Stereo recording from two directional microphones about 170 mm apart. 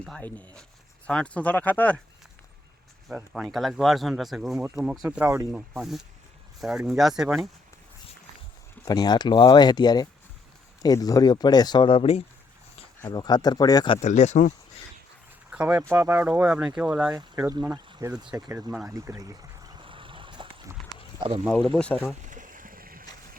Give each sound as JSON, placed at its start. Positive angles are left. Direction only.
{"t": 0.0, "sound": "speech", "side_deg": 5}
{"t": 3.1, "sound": "speech", "side_deg": -5}
{"t": 4.5, "sound": "speech", "side_deg": -15}
{"t": 5.5, "sound": "speech", "side_deg": -5}
{"t": 8.8, "sound": "speech", "side_deg": 25}
{"t": 14.0, "sound": "speech", "side_deg": 45}
{"t": 15.4, "sound": "a sound", "side_deg": -10}
{"t": 15.9, "sound": "speech", "side_deg": -15}
{"t": 17.2, "sound": "speech", "side_deg": -20}
{"t": 18.9, "sound": "a sound", "side_deg": -20}
{"t": 21.2, "sound": "speech", "side_deg": -30}
{"t": 21.4, "sound": "speech", "side_deg": 0}
{"t": 22.2, "sound": "boat", "side_deg": -50}